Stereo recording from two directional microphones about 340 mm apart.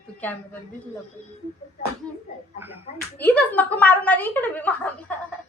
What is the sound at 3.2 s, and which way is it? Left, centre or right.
A woman's voice, centre.